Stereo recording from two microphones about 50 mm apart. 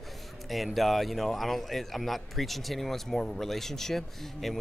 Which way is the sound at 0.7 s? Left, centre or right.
Centre.